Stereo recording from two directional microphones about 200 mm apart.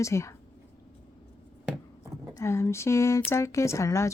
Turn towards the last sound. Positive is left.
turn(degrees=15)  # may be behind; listen again after turning